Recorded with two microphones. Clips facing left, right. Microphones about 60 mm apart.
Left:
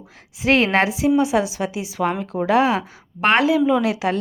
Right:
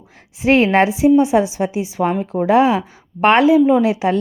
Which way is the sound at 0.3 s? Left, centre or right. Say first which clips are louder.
Right 4 dB; right.